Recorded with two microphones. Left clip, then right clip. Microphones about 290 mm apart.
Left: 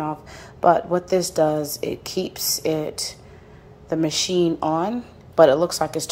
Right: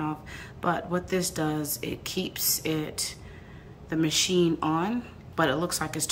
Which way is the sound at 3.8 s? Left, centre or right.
Centre.